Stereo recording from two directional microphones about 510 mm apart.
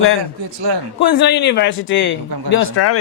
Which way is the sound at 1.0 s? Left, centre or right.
Centre.